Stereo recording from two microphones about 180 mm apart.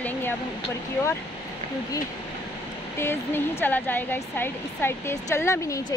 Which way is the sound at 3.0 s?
15° left (ahead or behind).